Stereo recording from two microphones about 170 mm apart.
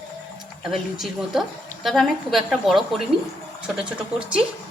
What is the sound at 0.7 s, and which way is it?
A woman's voice, centre (ahead or behind).